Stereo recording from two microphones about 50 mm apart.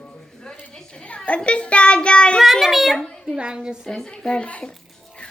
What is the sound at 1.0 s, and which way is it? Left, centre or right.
A child's voice, left.